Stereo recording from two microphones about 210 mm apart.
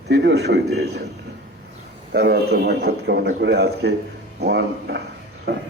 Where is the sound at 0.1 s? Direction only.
55° right (ahead or behind).